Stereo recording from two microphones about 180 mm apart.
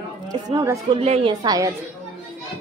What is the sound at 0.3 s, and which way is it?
Speech, 20° right (ahead or behind).